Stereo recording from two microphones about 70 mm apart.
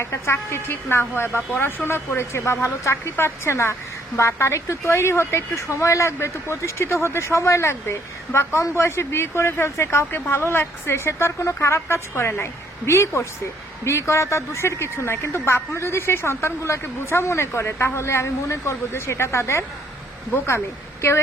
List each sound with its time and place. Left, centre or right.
0.0 s a woman's voice: left